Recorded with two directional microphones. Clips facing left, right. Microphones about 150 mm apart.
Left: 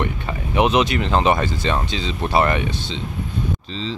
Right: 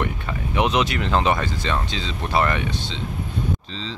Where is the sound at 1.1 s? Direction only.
20° left (ahead or behind).